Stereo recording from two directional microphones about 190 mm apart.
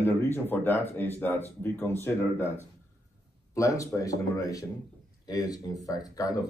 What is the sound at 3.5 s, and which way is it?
A man's voice, 15° left (ahead or behind).